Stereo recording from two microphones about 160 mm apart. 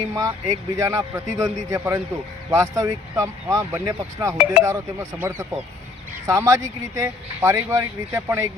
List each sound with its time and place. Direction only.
0.1 s speech: 20° right (ahead or behind)